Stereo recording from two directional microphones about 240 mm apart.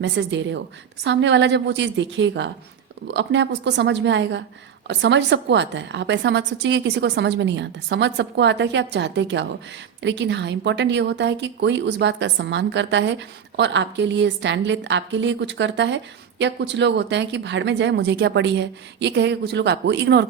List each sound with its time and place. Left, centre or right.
0.0 s a woman's voice: right